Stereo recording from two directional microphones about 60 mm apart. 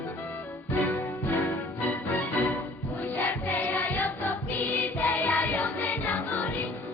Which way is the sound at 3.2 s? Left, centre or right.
Left.